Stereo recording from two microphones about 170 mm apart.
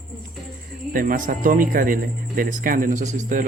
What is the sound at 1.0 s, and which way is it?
A man's voice, 50° right (ahead or behind).